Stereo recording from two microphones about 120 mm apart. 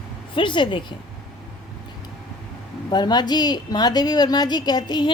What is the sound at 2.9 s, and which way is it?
A child's voice, 35° left (ahead or behind).